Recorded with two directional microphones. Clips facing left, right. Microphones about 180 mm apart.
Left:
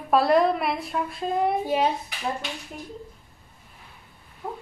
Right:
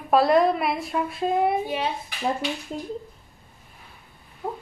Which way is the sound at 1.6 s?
40° left (ahead or behind).